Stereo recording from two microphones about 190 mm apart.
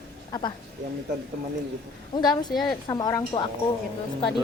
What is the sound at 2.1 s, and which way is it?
Speech, 20° left (ahead or behind).